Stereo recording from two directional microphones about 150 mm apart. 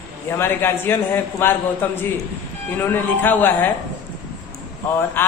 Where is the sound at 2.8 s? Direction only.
10° left (ahead or behind).